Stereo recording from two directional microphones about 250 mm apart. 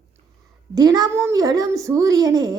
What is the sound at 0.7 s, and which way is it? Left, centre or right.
A woman's voice, centre.